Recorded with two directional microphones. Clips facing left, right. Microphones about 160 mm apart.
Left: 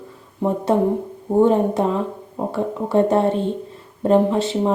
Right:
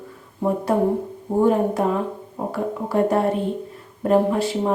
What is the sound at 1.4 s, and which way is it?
Speech, 25° left (ahead or behind).